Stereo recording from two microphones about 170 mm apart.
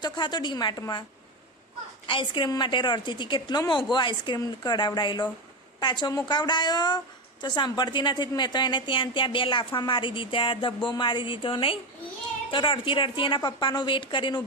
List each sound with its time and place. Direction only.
0.0 s a woman's voice: 25° left (ahead or behind)
2.0 s a woman's voice: 30° left (ahead or behind)